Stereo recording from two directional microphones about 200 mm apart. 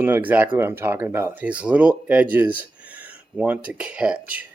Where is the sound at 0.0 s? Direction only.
10° right (ahead or behind).